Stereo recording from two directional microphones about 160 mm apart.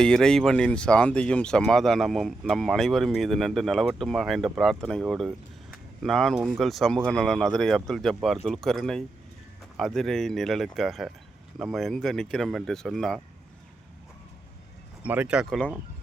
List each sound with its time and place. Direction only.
0.0 s speech: 5° left (ahead or behind)
15.0 s speech: 10° right (ahead or behind)